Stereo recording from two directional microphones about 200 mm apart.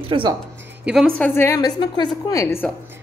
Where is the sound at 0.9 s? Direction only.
5° left (ahead or behind).